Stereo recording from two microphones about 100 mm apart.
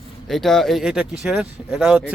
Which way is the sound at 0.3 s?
Centre (ahead or behind).